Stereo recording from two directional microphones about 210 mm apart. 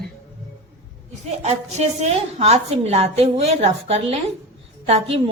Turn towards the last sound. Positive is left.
turn(degrees=-30)  # may be behind; listen again after turning